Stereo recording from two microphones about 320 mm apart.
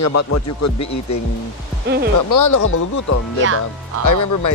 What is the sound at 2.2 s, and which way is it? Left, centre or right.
Speech, left.